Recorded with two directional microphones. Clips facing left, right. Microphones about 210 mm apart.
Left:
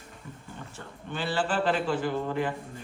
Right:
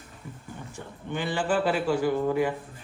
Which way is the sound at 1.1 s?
15° right (ahead or behind).